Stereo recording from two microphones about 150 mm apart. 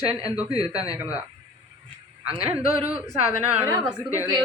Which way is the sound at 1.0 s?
10° right (ahead or behind).